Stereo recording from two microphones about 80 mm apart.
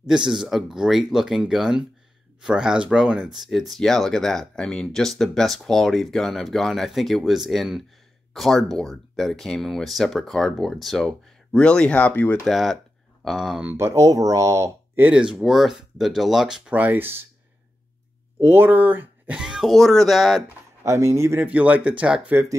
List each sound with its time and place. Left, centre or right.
0.0 s speech: centre
12.4 s speech: centre
13.7 s speech: right
15.0 s speech: centre
16.7 s speech: right
18.4 s speech: right
19.4 s speech: centre
20.8 s speech: right
21.5 s speech: centre